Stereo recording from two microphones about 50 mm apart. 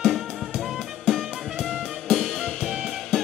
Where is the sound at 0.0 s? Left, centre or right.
Centre.